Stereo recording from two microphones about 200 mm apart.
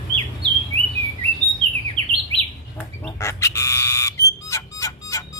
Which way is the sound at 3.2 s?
15° left (ahead or behind).